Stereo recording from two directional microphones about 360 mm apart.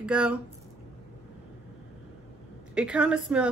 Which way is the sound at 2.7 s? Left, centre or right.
Centre.